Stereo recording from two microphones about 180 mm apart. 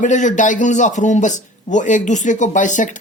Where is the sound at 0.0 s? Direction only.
45° left (ahead or behind).